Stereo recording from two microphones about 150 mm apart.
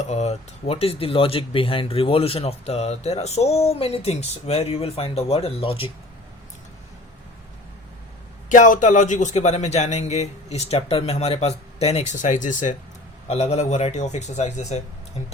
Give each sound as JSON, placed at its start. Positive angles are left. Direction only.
{"t": 0.0, "sound": "speech", "side_deg": 50}
{"t": 8.4, "sound": "a man's voice", "side_deg": 60}
{"t": 13.2, "sound": "a man's voice", "side_deg": 45}